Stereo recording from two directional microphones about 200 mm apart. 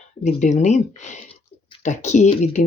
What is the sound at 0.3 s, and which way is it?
Speech, 35° left (ahead or behind).